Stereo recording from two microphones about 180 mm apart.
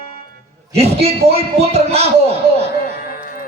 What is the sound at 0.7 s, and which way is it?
Speech, 35° right (ahead or behind).